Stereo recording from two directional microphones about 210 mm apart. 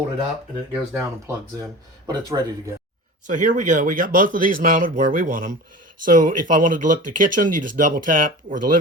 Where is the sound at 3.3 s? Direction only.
35° right (ahead or behind).